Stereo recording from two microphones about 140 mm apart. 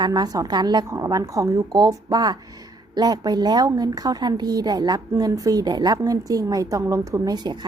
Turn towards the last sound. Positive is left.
turn(degrees=-30)  # may be behind; listen again after turning